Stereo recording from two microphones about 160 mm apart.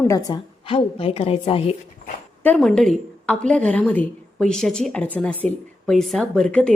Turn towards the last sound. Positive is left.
turn(degrees=5)  # may be behind; listen again after turning